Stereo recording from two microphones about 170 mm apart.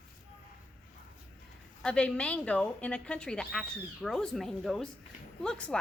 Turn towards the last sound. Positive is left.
turn(degrees=5)  # may be behind; listen again after turning